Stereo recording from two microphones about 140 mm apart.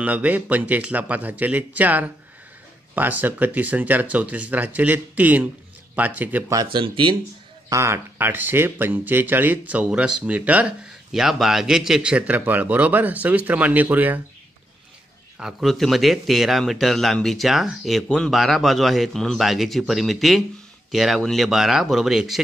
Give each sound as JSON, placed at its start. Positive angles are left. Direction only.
{"t": 0.0, "sound": "speech", "side_deg": -10}
{"t": 6.5, "sound": "speech", "side_deg": -30}
{"t": 7.7, "sound": "speech", "side_deg": -20}
{"t": 15.3, "sound": "speech", "side_deg": -5}